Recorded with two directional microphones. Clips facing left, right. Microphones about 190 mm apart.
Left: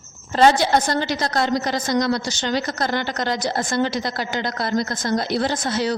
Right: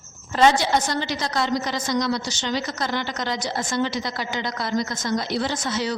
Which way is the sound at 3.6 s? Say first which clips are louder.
Left 2 dB; 55° left (ahead or behind).